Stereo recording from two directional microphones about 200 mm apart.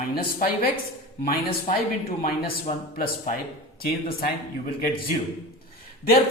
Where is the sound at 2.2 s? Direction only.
45° left (ahead or behind).